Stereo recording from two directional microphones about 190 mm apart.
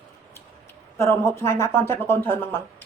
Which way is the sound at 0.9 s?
15° left (ahead or behind).